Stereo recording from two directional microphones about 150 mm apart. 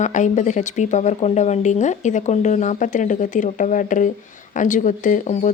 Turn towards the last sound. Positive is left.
turn(degrees=60)  # may be behind; listen again after turning